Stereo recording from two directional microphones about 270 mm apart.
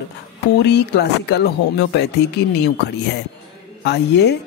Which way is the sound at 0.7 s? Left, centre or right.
Left.